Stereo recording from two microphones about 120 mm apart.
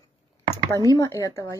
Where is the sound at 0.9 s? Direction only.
30° left (ahead or behind).